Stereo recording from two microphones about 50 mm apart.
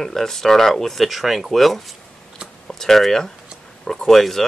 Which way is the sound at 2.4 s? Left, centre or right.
Centre.